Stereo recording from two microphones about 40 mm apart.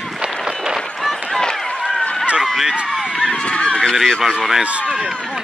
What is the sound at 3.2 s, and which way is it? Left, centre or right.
Run, left.